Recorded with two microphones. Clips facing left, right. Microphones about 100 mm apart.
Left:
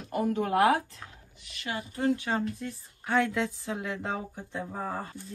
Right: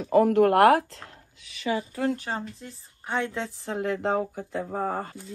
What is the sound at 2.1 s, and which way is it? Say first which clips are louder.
Speech: left 2 dB; 30° right (ahead or behind).